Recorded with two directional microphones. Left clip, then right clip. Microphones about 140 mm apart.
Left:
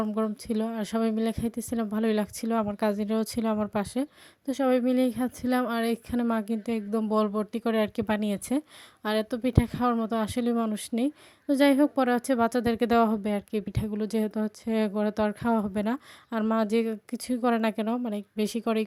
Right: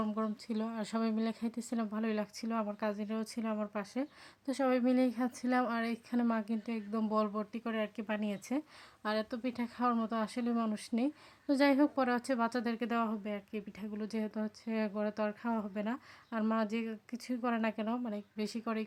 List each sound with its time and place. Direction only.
0.2 s a woman's voice: 30° left (ahead or behind)
4.4 s a woman's voice: 20° left (ahead or behind)